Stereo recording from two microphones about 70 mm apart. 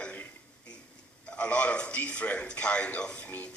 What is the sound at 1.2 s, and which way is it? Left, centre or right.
A man's voice, centre.